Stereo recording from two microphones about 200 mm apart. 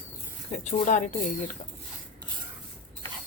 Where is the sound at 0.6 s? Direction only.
40° left (ahead or behind).